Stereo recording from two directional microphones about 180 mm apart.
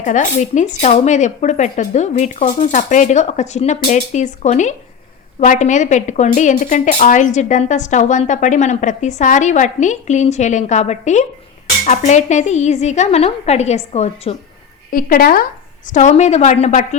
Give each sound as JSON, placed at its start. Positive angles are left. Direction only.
{"t": 0.0, "sound": "a woman's voice", "side_deg": 40}
{"t": 14.9, "sound": "speech", "side_deg": 50}
{"t": 15.9, "sound": "a woman's voice", "side_deg": 40}